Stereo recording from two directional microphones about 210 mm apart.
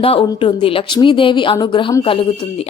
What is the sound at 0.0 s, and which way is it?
Speech, 25° left (ahead or behind).